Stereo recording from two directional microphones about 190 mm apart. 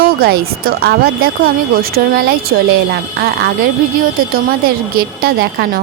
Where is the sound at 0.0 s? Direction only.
50° right (ahead or behind).